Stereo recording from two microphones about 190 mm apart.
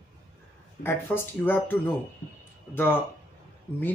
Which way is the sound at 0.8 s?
10° left (ahead or behind).